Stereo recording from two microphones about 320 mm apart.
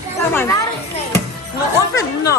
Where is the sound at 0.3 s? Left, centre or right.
Centre.